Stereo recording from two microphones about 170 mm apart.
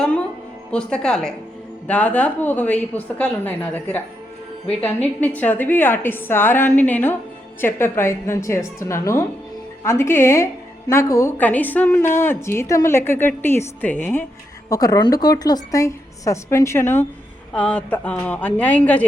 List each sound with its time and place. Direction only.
0.7 s a woman's voice: 5° left (ahead or behind)
5.2 s a woman's voice: 10° left (ahead or behind)